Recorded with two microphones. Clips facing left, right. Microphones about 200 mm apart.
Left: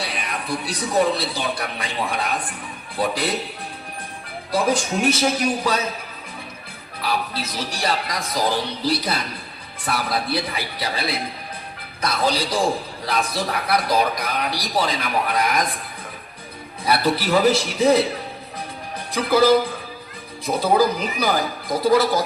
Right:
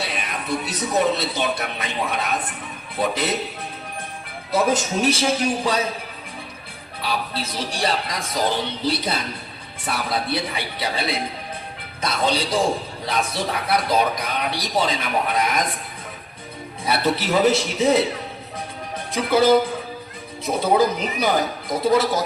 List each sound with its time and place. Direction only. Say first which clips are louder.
0.0 s a man's voice: even; 25° right (ahead or behind)
4.5 s a man's voice: right 1 dB; 20° right (ahead or behind)
7.0 s a man's voice: left 1 dB; 30° right (ahead or behind)
16.8 s a man's voice: left 1 dB; 25° right (ahead or behind)
19.1 s a man's voice: even; 25° right (ahead or behind)